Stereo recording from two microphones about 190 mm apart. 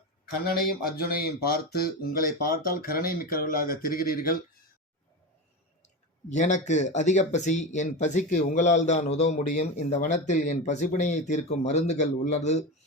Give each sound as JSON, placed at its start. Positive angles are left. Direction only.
{"t": 0.4, "sound": "speech", "side_deg": 50}
{"t": 6.2, "sound": "a man's voice", "side_deg": 40}